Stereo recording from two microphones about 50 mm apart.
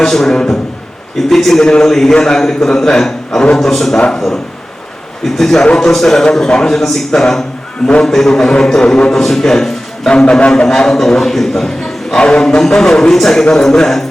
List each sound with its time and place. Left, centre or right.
0.0 s a man's voice: centre
1.6 s a man's voice: centre
5.4 s a man's voice: centre
12.1 s a man's voice: centre